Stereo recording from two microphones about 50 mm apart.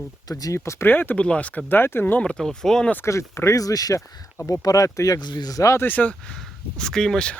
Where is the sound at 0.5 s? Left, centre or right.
Left.